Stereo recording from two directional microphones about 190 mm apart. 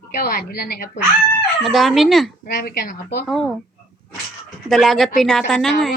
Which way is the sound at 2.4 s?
50° left (ahead or behind).